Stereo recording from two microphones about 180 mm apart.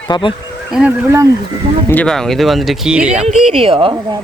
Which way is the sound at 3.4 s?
35° right (ahead or behind).